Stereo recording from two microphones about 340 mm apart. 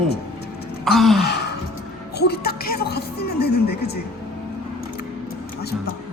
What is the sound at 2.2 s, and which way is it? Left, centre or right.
Music, left.